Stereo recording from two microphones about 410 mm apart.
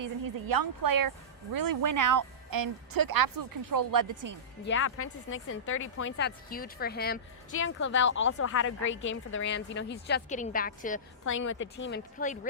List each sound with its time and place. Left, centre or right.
0.0 s speech: right
4.6 s speech: left